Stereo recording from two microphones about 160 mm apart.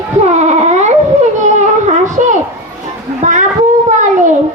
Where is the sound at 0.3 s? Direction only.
45° right (ahead or behind).